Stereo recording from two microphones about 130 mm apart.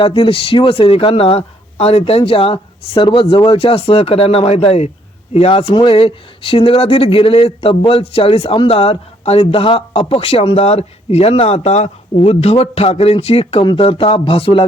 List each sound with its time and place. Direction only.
0.0 s speech: 45° left (ahead or behind)